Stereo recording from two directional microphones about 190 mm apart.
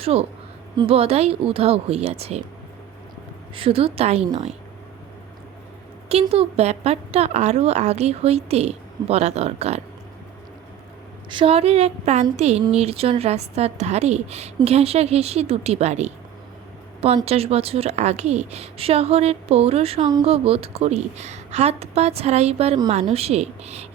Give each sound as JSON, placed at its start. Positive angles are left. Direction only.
{"t": 0.0, "sound": "speech", "side_deg": -30}
{"t": 3.5, "sound": "speech", "side_deg": -30}
{"t": 6.1, "sound": "speech", "side_deg": -30}
{"t": 11.3, "sound": "speech", "side_deg": -30}